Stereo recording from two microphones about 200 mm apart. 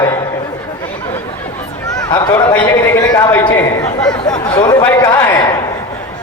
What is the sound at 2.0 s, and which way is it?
A man's voice, 20° left (ahead or behind).